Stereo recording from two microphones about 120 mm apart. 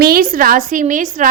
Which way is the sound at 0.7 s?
90° right.